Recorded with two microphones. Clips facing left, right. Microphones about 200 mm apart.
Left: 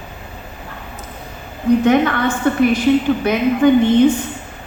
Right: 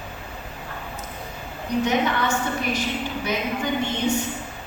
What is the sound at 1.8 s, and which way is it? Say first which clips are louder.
A woman's voice: left 8 dB; 55° left (ahead or behind).